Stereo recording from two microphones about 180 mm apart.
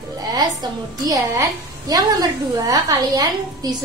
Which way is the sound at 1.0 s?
20° right (ahead or behind).